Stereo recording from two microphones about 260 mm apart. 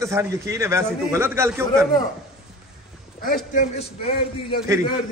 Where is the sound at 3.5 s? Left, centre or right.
Left.